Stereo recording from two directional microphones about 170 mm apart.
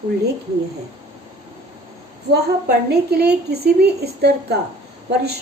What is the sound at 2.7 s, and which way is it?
A woman's voice, 75° right (ahead or behind).